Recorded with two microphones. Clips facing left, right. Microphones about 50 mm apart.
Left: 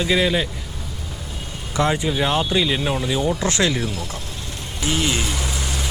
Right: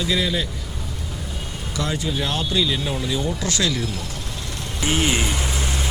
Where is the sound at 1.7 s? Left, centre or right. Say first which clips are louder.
Left 5 dB; left.